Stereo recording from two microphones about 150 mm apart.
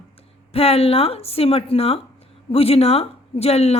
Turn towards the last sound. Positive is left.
turn(degrees=45)  # may be behind; listen again after turning